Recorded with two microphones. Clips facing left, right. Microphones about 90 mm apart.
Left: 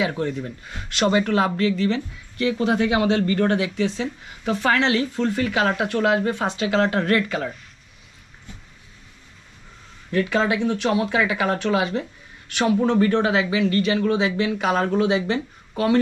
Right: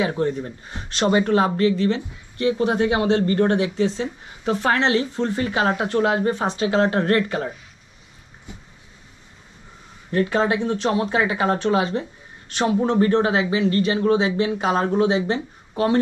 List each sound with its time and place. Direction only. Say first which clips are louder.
0.3 s speech: right 2 dB; 25° right (ahead or behind)
8.5 s vehicle: right 3 dB; 15° right (ahead or behind)
10.1 s speech: right 1 dB; 20° right (ahead or behind)